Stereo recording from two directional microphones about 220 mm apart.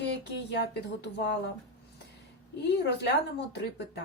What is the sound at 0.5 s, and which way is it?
Speech, 50° left (ahead or behind).